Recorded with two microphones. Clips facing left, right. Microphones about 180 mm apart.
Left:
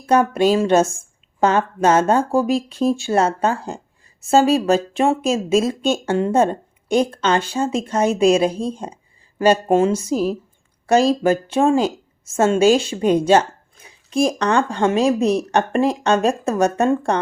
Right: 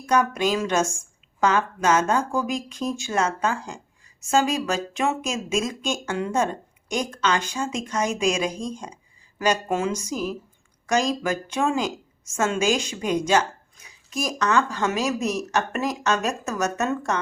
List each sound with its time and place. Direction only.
0.0 s a woman's voice: 30° left (ahead or behind)